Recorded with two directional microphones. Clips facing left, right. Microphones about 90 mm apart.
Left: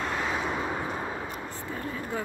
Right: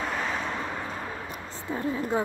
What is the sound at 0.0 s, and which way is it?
Vehicle, 5° left (ahead or behind).